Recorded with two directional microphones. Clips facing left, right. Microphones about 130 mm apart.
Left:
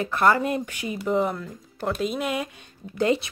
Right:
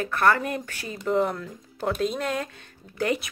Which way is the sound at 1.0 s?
Centre (ahead or behind).